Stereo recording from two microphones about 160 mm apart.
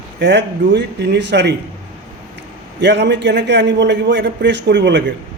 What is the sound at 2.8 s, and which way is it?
A man's voice, 90° right.